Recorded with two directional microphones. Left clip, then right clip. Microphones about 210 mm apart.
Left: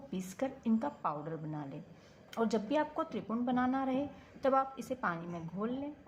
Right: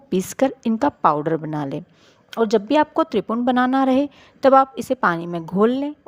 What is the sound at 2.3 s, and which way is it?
A woman's voice, 40° right (ahead or behind).